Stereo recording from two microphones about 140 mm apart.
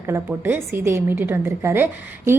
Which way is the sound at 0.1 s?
15° right (ahead or behind).